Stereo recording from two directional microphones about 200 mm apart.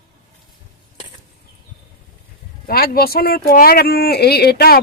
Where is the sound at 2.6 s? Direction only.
50° left (ahead or behind).